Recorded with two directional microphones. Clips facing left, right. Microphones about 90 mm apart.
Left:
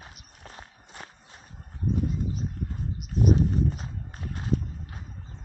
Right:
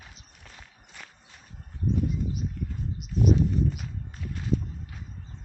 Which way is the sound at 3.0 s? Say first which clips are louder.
Even; 45° left (ahead or behind).